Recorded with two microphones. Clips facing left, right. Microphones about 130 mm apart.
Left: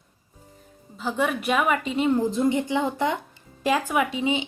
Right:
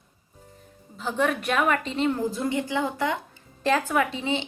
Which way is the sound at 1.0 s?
5° left (ahead or behind).